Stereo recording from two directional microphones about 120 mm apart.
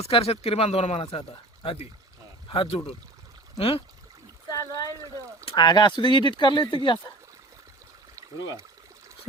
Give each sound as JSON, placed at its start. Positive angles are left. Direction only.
{"t": 0.0, "sound": "speech", "side_deg": 55}
{"t": 4.4, "sound": "a sound", "side_deg": 30}
{"t": 5.5, "sound": "speech", "side_deg": 40}